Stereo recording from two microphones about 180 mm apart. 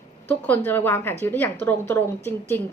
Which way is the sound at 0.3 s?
10° left (ahead or behind).